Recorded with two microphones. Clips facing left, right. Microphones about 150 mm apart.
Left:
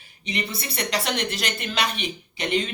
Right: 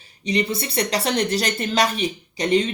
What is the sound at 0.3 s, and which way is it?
Speech, 35° right (ahead or behind).